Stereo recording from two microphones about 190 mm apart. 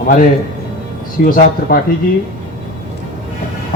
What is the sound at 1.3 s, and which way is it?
Speech, 45° left (ahead or behind).